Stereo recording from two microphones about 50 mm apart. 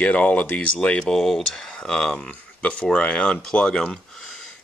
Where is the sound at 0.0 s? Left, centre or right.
Left.